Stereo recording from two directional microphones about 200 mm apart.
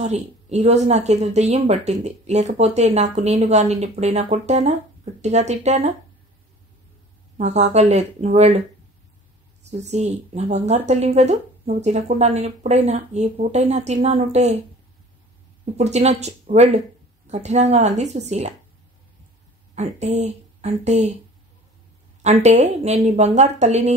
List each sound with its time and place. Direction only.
0.0 s speech: 35° right (ahead or behind)
7.3 s speech: 35° right (ahead or behind)
9.7 s speech: 35° right (ahead or behind)
15.7 s speech: 35° right (ahead or behind)
19.7 s a woman's voice: 35° right (ahead or behind)
22.2 s speech: 35° right (ahead or behind)